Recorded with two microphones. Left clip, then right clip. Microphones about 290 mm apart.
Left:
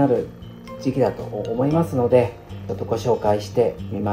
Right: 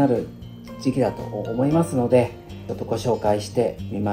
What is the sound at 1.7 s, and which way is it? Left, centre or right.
Speech, right.